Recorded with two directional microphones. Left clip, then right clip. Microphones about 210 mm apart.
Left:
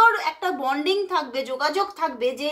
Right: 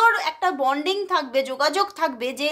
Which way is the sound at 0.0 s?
35° right (ahead or behind).